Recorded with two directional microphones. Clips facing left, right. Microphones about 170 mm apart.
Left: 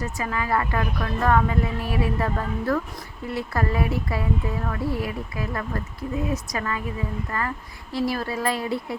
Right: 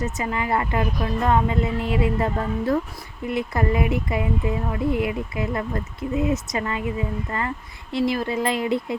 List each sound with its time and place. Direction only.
0.0 s a woman's voice: 20° right (ahead or behind)